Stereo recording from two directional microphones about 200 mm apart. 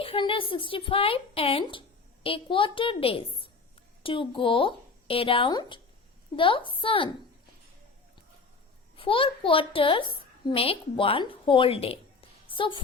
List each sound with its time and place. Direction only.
0.0 s a woman's voice: 25° left (ahead or behind)
9.0 s a woman's voice: 25° left (ahead or behind)